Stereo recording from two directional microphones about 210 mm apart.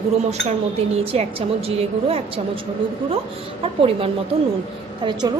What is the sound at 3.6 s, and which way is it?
A woman's voice, 25° right (ahead or behind).